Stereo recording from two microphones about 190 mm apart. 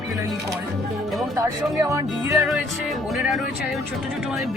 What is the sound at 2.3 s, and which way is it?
Speech, centre (ahead or behind).